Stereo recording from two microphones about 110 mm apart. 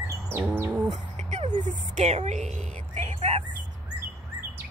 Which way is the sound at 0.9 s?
90° right.